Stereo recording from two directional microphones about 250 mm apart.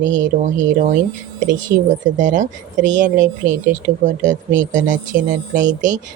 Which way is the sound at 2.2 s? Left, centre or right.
Right.